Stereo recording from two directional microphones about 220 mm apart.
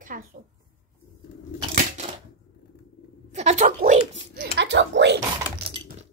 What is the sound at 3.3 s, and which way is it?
Speech, 30° right (ahead or behind).